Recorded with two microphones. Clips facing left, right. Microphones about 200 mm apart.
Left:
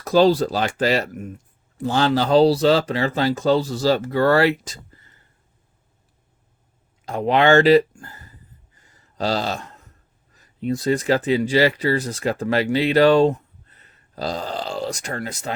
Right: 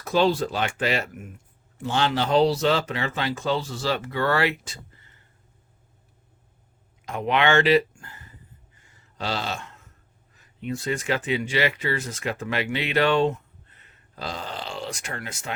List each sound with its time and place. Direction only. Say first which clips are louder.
0.0 s speech: left 6 dB; 40° left (ahead or behind)
7.0 s speech: left 5 dB; 35° left (ahead or behind)